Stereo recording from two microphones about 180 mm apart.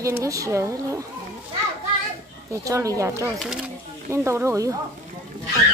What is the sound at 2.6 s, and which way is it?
A child's voice, 20° right (ahead or behind).